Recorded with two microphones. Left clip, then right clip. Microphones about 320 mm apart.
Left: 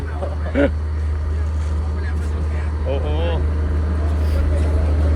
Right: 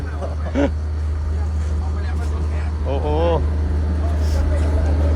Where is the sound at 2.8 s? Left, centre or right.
Centre.